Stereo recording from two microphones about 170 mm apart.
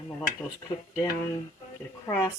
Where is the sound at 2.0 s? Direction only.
15° left (ahead or behind).